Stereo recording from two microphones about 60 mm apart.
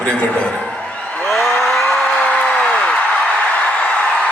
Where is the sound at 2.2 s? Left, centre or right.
Left.